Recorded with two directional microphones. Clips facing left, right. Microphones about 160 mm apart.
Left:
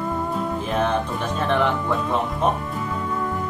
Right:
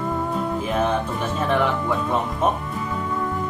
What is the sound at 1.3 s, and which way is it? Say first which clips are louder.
Speech: even; 5° right (ahead or behind).